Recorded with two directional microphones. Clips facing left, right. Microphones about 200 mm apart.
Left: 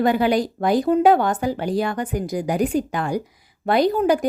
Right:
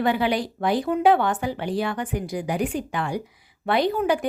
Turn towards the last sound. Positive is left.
turn(degrees=40)  # may be behind; listen again after turning